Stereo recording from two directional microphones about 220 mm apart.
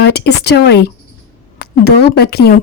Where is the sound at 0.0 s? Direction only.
50° left (ahead or behind).